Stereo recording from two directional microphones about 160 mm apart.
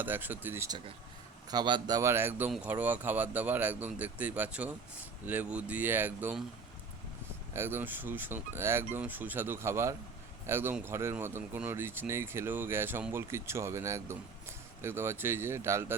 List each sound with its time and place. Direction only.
0.0 s speech: 10° right (ahead or behind)
1.5 s speech: 25° right (ahead or behind); by 6.4 s 10° right (ahead or behind)
7.5 s speech: 15° right (ahead or behind)